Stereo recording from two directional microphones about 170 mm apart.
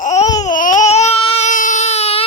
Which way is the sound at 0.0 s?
45° left (ahead or behind).